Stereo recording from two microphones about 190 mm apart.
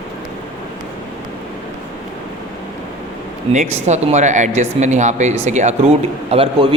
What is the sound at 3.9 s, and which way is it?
A man's voice, 35° right (ahead or behind).